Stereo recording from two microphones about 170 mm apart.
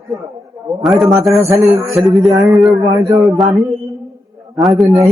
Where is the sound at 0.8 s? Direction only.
Centre (ahead or behind).